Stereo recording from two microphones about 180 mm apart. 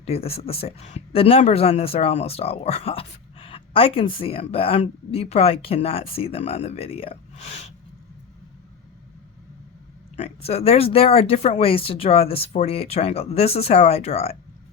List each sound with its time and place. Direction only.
0.0 s speech: 35° left (ahead or behind)
10.2 s speech: 35° left (ahead or behind)